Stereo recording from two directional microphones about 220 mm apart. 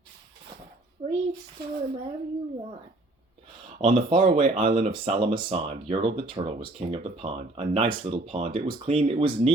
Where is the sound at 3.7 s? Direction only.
25° right (ahead or behind).